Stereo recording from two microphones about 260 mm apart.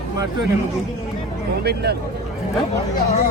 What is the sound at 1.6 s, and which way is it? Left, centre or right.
Speech, right.